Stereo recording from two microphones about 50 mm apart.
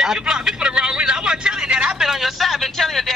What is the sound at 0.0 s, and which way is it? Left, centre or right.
A man's voice, centre.